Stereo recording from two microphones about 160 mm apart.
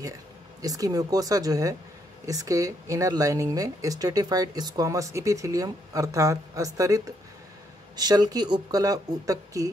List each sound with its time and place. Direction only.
0.6 s speech: 20° right (ahead or behind)